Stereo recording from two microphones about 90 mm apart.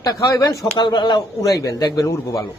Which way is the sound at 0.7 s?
55° left (ahead or behind).